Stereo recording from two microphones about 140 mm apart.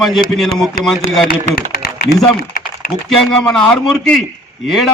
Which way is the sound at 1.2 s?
90° left.